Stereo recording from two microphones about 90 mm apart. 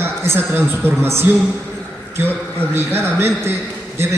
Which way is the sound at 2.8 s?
25° right (ahead or behind).